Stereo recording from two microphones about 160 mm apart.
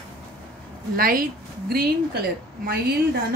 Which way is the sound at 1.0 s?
60° right (ahead or behind).